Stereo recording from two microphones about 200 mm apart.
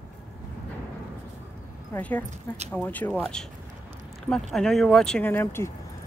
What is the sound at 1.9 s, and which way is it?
Speech, 5° left (ahead or behind).